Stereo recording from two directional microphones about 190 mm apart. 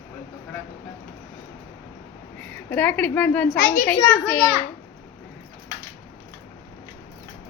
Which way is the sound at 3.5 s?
55° left (ahead or behind).